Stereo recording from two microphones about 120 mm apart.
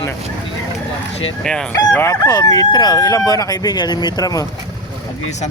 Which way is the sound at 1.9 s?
20° left (ahead or behind).